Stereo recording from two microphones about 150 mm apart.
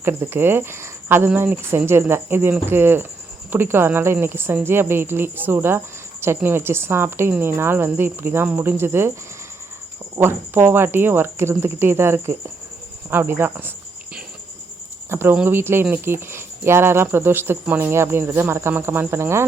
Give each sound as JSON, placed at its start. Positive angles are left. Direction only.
{"t": 0.0, "sound": "speech", "side_deg": -15}
{"t": 10.2, "sound": "speech", "side_deg": -15}
{"t": 15.1, "sound": "speech", "side_deg": -15}